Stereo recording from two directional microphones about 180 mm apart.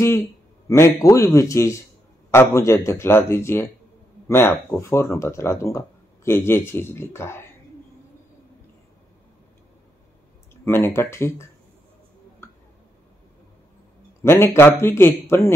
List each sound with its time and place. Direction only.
0.7 s speech: 15° left (ahead or behind)
10.5 s speech: 15° left (ahead or behind)
14.2 s speech: 15° left (ahead or behind)